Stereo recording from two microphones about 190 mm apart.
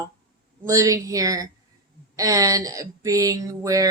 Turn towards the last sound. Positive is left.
turn(degrees=-20)  # may be behind; listen again after turning